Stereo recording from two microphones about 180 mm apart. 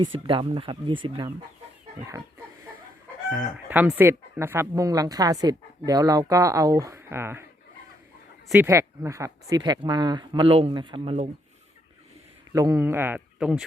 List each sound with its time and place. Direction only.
0.0 s speech: 30° right (ahead or behind)
3.2 s speech: 10° right (ahead or behind)
8.4 s speech: 10° right (ahead or behind); by 11.3 s 35° right (ahead or behind)
12.5 s speech: 20° right (ahead or behind)